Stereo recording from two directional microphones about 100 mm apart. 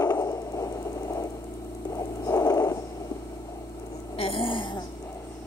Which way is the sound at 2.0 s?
30° left (ahead or behind).